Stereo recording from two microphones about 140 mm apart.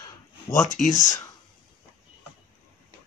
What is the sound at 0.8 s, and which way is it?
Speech, 65° left (ahead or behind).